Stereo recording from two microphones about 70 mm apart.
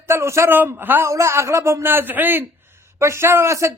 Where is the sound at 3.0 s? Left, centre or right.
Right.